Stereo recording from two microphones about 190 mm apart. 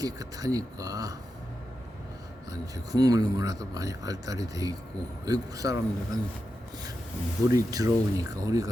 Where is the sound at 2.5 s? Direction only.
20° right (ahead or behind).